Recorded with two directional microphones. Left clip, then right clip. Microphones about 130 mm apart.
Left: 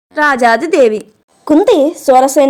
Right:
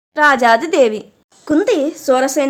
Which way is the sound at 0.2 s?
25° left (ahead or behind).